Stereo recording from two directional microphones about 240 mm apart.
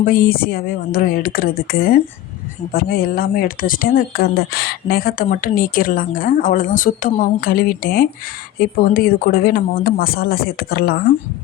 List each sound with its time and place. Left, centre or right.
0.0 s speech: left